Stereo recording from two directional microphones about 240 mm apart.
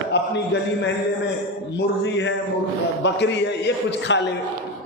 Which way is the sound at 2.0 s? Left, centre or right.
Left.